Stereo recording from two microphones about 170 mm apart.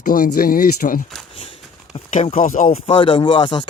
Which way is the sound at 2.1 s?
50° left (ahead or behind).